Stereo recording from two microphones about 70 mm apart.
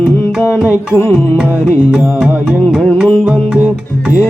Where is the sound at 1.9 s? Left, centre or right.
Centre.